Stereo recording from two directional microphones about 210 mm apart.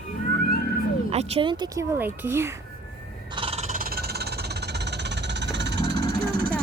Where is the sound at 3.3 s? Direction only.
30° right (ahead or behind); by 6.0 s 55° right (ahead or behind).